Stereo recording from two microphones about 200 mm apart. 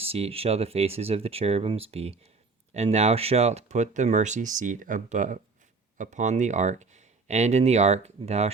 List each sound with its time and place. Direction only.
0.0 s speech: 30° right (ahead or behind)